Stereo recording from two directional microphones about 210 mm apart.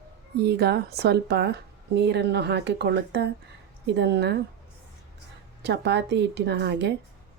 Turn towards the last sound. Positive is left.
turn(degrees=-55)  # may be behind; listen again after turning